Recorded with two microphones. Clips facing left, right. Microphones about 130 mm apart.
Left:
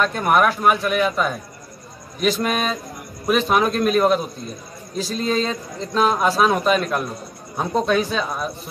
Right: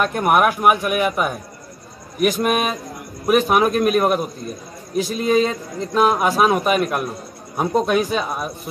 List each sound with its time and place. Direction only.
0.0 s a man's voice: 15° right (ahead or behind)